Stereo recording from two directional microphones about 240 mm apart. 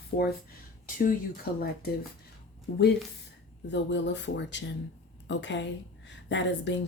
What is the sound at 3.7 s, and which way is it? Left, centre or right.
Speech, left.